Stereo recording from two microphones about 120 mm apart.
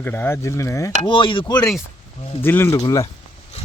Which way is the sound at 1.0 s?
45° left (ahead or behind).